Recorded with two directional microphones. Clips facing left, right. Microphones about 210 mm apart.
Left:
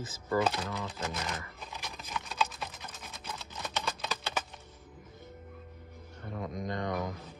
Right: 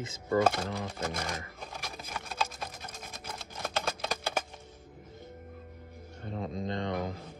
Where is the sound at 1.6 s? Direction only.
55° right (ahead or behind).